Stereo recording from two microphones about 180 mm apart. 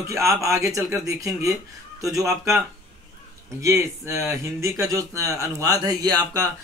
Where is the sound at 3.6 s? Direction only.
15° right (ahead or behind).